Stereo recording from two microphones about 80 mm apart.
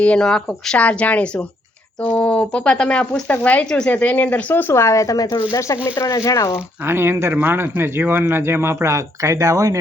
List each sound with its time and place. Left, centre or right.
0.0 s speech: centre
4.7 s speech: left
5.5 s speech: left
6.8 s speech: right